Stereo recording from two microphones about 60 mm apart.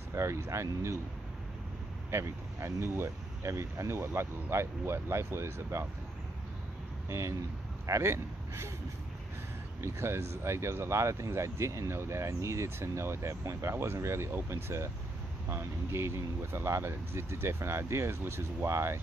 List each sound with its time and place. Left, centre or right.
0.1 s speech: right
2.0 s speech: right
7.1 s speech: right
9.8 s speech: right